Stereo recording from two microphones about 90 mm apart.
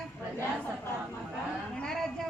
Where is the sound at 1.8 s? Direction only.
5° left (ahead or behind).